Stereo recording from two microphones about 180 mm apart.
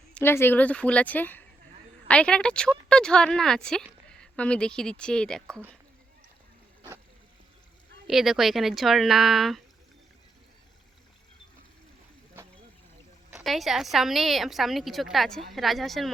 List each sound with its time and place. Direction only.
0.1 s a woman's voice: 10° left (ahead or behind)
8.0 s a woman's voice: centre (ahead or behind)
13.3 s a woman's voice: centre (ahead or behind)